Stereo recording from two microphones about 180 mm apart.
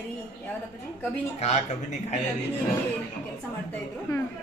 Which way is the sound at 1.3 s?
40° left (ahead or behind).